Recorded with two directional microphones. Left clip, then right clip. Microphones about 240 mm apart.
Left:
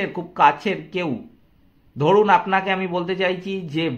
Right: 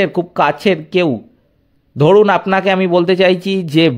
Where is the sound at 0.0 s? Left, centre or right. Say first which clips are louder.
Right 3 dB; right.